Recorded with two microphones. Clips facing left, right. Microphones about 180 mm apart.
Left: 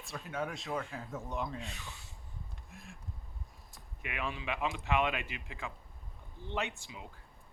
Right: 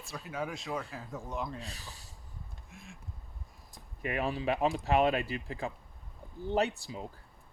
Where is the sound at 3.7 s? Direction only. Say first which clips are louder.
Right 9 dB; 35° right (ahead or behind).